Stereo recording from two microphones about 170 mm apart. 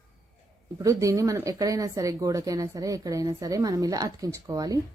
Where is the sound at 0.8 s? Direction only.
20° right (ahead or behind).